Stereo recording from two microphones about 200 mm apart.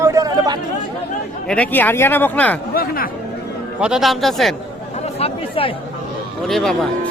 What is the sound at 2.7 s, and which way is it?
Speech, 45° left (ahead or behind).